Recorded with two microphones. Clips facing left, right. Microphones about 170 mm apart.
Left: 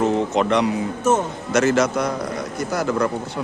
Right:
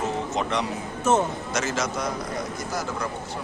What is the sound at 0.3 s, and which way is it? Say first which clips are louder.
Speech: left 8 dB; 65° left (ahead or behind).